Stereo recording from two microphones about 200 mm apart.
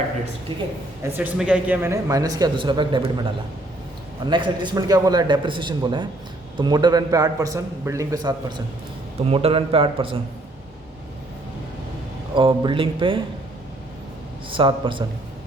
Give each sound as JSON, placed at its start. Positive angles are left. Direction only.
{"t": 1.1, "sound": "speech", "side_deg": -5}
{"t": 4.3, "sound": "a man's voice", "side_deg": -25}
{"t": 12.3, "sound": "a man's voice", "side_deg": -25}
{"t": 14.5, "sound": "a man's voice", "side_deg": -25}